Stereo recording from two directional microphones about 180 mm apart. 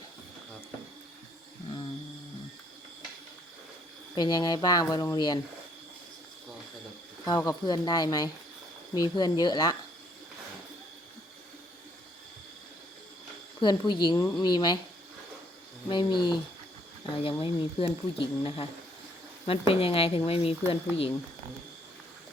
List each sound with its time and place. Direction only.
4.1 s speech: 25° left (ahead or behind)
7.3 s speech: 20° left (ahead or behind)
13.6 s speech: 25° left (ahead or behind)
15.9 s speech: 25° left (ahead or behind)
17.4 s speech: 30° left (ahead or behind)